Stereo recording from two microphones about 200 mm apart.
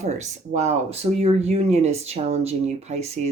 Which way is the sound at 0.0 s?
35° right (ahead or behind).